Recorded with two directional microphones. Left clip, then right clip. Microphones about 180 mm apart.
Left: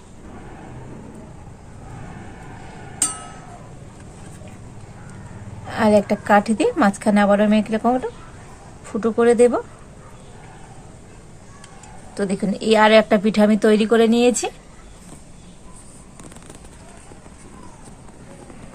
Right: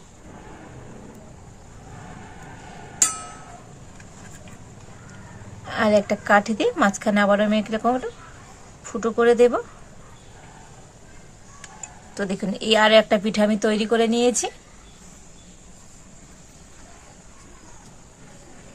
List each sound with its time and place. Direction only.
5.6 s a woman's voice: 10° right (ahead or behind)
12.1 s a woman's voice: 5° right (ahead or behind)